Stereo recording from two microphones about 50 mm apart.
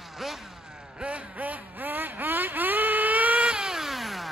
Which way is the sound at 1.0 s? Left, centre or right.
Right.